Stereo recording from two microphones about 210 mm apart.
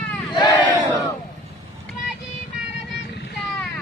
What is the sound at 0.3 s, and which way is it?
Crowd, 20° left (ahead or behind).